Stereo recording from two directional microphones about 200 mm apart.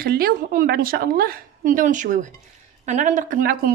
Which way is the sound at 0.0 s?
50° right (ahead or behind).